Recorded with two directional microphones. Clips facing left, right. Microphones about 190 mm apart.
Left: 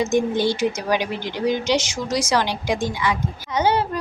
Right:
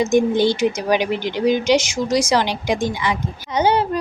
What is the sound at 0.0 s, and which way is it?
Speech, 15° right (ahead or behind).